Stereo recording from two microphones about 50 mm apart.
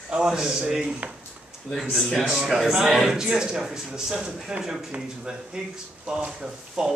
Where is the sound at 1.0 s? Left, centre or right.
Right.